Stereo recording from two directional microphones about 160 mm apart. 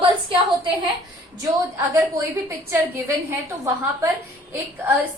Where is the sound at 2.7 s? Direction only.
10° right (ahead or behind).